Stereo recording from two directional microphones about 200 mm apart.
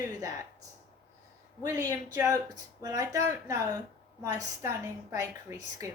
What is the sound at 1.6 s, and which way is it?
Speech, 15° right (ahead or behind).